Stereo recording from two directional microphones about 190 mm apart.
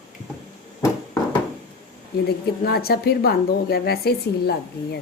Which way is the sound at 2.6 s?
55° left (ahead or behind).